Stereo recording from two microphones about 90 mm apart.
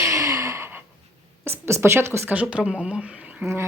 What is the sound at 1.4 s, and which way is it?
Speech, 30° right (ahead or behind).